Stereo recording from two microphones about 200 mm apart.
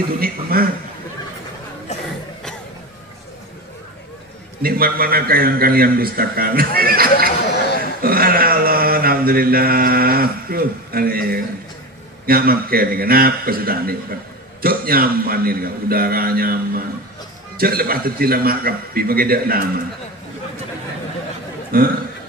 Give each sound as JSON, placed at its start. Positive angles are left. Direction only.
{"t": 0.2, "sound": "a man's voice", "side_deg": -50}
{"t": 4.6, "sound": "a man's voice", "side_deg": -50}
{"t": 8.0, "sound": "mantra", "side_deg": -50}
{"t": 12.3, "sound": "a man's voice", "side_deg": -50}
{"t": 21.7, "sound": "a man's voice", "side_deg": -45}